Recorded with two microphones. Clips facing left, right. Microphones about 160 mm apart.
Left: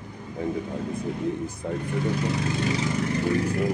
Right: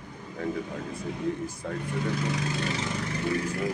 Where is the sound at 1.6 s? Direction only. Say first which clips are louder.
Left 5 dB; 15° left (ahead or behind).